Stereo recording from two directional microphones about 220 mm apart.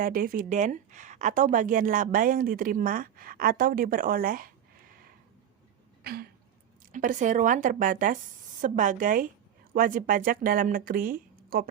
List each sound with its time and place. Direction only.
0.0 s speech: 40° right (ahead or behind)
6.0 s throat clearing: 45° right (ahead or behind)
6.9 s speech: 35° right (ahead or behind)